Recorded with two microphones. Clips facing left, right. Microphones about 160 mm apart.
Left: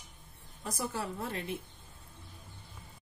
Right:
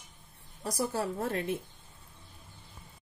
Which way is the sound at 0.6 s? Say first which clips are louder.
Right 5 dB; 35° right (ahead or behind).